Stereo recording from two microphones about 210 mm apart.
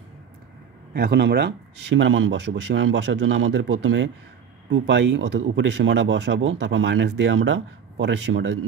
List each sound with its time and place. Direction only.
0.9 s speech: 50° right (ahead or behind)